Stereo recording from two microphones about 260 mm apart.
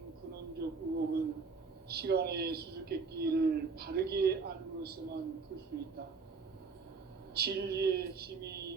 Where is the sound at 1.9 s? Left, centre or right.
Right.